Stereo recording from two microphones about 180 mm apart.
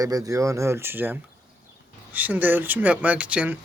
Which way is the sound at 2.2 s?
10° right (ahead or behind).